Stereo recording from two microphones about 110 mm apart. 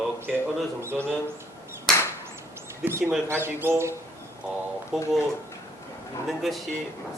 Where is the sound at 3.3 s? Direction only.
20° right (ahead or behind).